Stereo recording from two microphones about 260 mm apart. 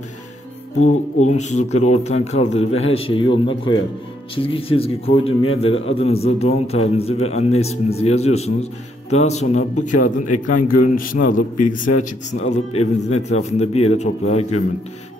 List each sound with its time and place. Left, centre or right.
0.7 s a man's voice: left
10.5 s a man's voice: left
11.1 s a man's voice: left